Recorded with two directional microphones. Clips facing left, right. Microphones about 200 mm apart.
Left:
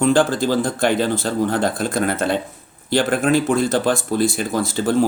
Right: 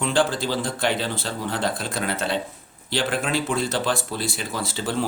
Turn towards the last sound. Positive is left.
turn(degrees=45)  # may be behind; listen again after turning